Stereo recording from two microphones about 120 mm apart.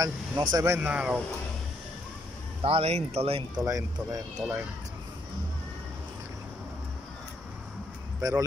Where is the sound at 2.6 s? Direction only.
55° right (ahead or behind).